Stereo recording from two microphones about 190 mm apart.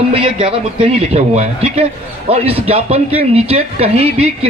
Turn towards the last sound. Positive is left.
turn(degrees=-30)  # may be behind; listen again after turning